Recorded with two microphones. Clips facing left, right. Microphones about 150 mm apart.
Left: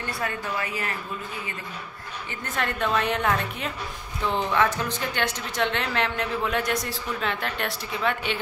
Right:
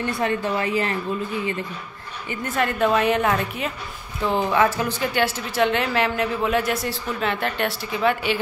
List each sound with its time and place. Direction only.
0.2 s a woman's voice: 30° right (ahead or behind)
2.4 s a woman's voice: 5° right (ahead or behind)